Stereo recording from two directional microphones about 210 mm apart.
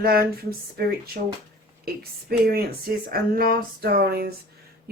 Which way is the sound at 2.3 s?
45° right (ahead or behind).